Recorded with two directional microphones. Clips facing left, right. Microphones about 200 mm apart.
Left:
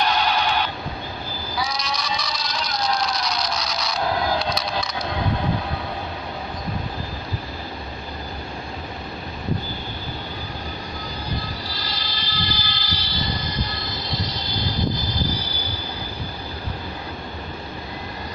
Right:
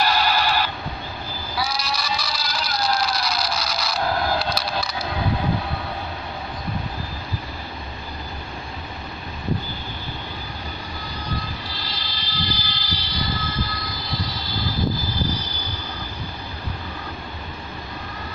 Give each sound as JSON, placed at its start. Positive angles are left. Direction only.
{"t": 0.0, "sound": "sheep", "side_deg": -5}
{"t": 1.6, "sound": "a sound", "side_deg": -5}
{"t": 11.6, "sound": "vehicle", "side_deg": 40}
{"t": 13.1, "sound": "vehicle", "side_deg": 20}